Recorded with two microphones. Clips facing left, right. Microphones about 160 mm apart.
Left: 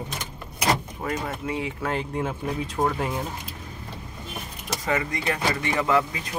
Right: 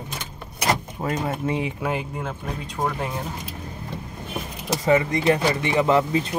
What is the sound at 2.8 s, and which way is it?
Speech, 5° left (ahead or behind).